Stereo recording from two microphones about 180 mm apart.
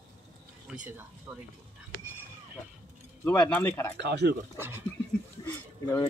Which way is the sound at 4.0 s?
70° right (ahead or behind).